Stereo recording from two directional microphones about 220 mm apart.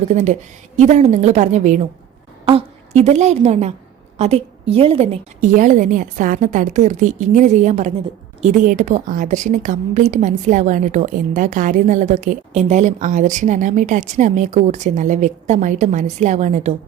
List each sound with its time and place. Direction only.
0.1 s a woman's voice: 35° right (ahead or behind)